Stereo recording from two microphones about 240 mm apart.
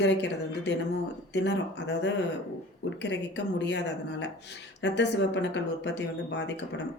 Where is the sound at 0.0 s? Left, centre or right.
Left.